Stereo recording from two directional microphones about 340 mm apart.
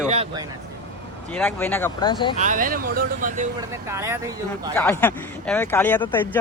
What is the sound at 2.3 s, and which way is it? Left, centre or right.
Speech, right.